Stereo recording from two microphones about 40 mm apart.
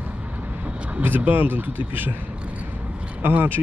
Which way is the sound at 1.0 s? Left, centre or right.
Right.